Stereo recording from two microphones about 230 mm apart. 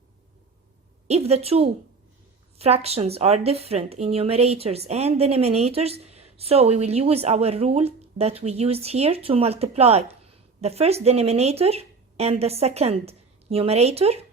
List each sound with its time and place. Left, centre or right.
1.0 s a woman's voice: right